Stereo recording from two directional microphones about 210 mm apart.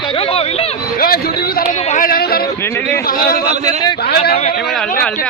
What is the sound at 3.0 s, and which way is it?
Speech, 45° left (ahead or behind).